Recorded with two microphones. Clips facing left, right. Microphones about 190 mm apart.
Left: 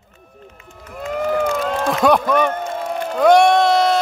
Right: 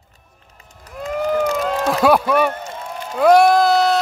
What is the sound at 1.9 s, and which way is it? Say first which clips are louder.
Speech: even; 5° right (ahead or behind).